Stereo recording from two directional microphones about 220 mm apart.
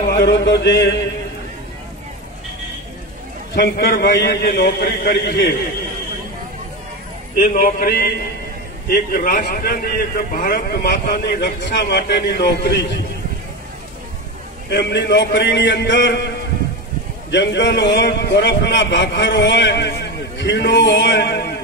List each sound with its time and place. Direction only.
0.1 s a man's voice: 50° left (ahead or behind)
3.5 s a man's voice: 45° left (ahead or behind)
7.5 s a man's voice: 40° left (ahead or behind)
14.7 s a man's voice: 50° left (ahead or behind)
17.3 s a man's voice: 55° left (ahead or behind)